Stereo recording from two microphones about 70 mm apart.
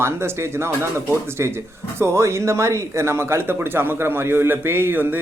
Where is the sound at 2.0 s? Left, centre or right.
Right.